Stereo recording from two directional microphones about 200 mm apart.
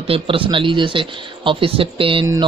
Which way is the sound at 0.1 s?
25° right (ahead or behind).